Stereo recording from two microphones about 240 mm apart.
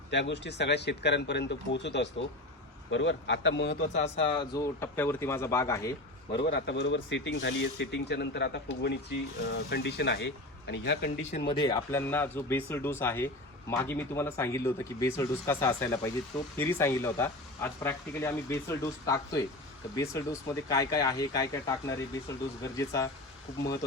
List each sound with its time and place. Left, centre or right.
0.1 s speech: left
3.9 s speech: left
6.3 s speech: left
11.3 s speech: left